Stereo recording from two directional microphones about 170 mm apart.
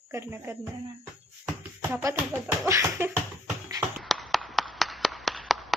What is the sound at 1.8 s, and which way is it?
Speech, 15° right (ahead or behind).